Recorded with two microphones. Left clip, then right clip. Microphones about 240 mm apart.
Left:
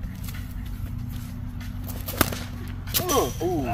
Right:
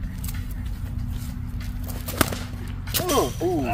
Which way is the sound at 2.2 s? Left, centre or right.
Centre.